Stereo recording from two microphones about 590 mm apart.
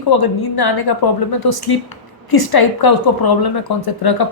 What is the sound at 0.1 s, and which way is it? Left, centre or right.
A woman's voice, left.